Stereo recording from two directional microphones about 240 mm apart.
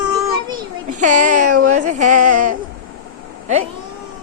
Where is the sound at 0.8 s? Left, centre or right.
Right.